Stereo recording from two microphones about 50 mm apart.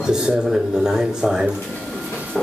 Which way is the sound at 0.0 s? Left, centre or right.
Centre.